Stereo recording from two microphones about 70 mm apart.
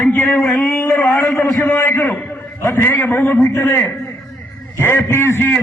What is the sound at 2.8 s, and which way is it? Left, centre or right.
Speech, left.